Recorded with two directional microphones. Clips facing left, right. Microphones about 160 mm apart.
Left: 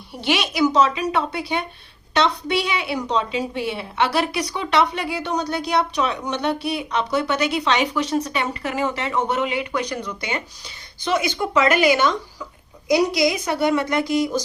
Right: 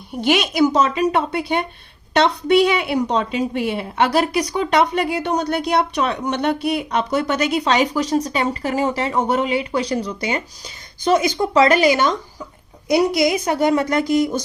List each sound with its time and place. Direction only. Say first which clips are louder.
0.2 s a woman's voice: right 4 dB; 50° right (ahead or behind)
12.9 s a woman's voice: right 2 dB; 55° right (ahead or behind)